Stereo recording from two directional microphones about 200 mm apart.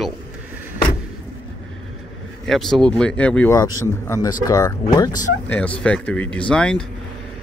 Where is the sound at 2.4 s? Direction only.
Centre (ahead or behind).